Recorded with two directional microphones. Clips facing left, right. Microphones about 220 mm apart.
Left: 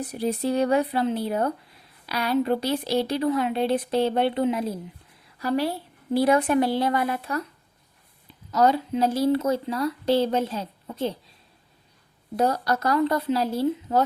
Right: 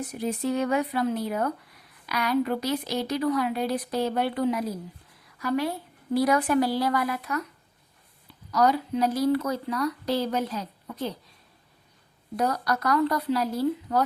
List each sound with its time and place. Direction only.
0.0 s speech: 35° left (ahead or behind)
5.2 s a sound: 35° left (ahead or behind)
6.1 s speech: 25° left (ahead or behind)
12.4 s speech: 30° left (ahead or behind)